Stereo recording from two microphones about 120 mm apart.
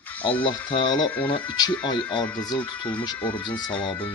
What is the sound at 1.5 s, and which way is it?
Speech, 35° left (ahead or behind).